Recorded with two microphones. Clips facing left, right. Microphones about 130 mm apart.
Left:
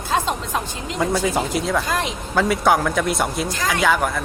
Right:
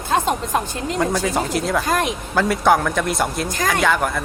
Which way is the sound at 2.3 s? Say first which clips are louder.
Right 1 dB; centre (ahead or behind).